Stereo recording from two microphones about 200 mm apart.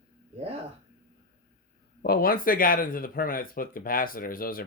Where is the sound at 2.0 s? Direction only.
50° left (ahead or behind).